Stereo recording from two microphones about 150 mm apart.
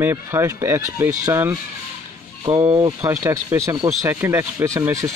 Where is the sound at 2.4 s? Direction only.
30° right (ahead or behind).